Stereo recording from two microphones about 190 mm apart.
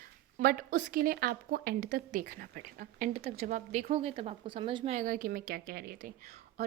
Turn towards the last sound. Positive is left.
turn(degrees=-45)  # may be behind; listen again after turning